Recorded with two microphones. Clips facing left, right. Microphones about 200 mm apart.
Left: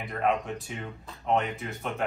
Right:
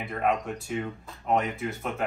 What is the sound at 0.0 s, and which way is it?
Speech, centre (ahead or behind).